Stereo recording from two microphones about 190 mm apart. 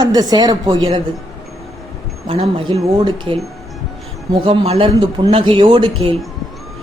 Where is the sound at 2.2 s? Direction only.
30° right (ahead or behind).